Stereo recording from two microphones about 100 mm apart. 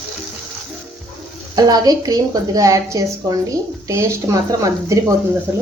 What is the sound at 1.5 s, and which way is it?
A woman's voice, 40° right (ahead or behind).